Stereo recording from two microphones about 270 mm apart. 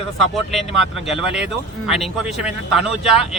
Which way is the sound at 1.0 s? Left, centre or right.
Centre.